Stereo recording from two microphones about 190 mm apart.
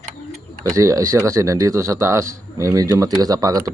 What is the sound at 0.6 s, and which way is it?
Speech, 15° right (ahead or behind).